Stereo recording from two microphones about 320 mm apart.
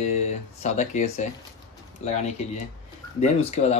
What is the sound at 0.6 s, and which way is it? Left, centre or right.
Speech, left.